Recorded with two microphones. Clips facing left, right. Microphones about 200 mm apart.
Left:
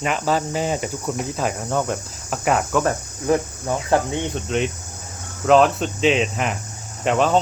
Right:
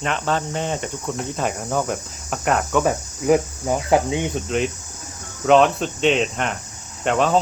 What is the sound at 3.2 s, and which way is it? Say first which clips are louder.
Speech: right 3 dB; 15° right (ahead or behind).